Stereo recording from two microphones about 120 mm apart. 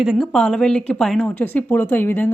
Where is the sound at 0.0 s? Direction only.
5° right (ahead or behind).